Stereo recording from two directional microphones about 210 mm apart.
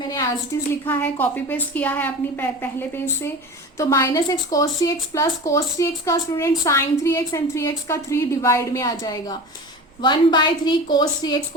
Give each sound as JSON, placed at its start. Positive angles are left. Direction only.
{"t": 0.9, "sound": "a woman's voice", "side_deg": 10}